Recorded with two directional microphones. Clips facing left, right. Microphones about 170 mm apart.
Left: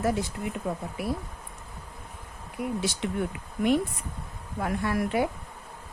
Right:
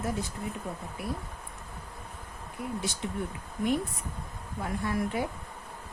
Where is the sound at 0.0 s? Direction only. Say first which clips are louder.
Left 6 dB; 80° left.